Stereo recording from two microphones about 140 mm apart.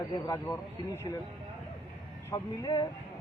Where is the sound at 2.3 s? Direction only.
25° left (ahead or behind).